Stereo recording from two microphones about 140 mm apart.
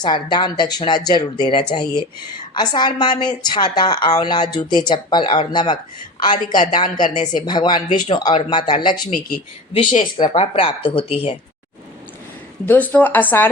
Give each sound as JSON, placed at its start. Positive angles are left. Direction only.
{"t": 0.0, "sound": "a woman's voice", "side_deg": 30}
{"t": 10.0, "sound": "a woman's voice", "side_deg": 30}
{"t": 10.3, "sound": "a woman's voice", "side_deg": 45}
{"t": 12.6, "sound": "speech", "side_deg": 10}